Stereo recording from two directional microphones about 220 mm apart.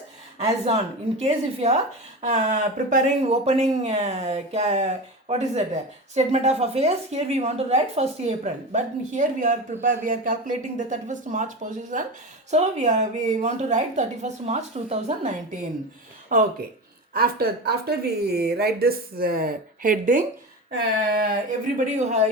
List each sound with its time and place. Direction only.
0.3 s a woman's voice: 30° right (ahead or behind)
16.3 s a woman's voice: 35° right (ahead or behind)
21.8 s a woman's voice: 30° right (ahead or behind)